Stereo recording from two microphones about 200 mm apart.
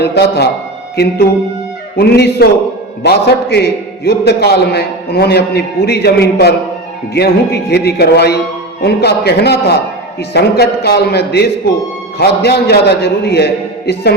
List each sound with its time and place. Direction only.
0.0 s a man's voice: 55° left (ahead or behind)
2.0 s a man's voice: 50° left (ahead or behind)